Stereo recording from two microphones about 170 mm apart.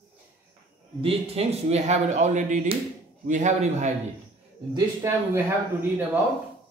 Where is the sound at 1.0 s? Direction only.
35° right (ahead or behind).